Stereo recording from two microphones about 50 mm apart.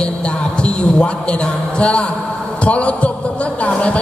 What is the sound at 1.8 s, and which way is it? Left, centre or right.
A man's voice, left.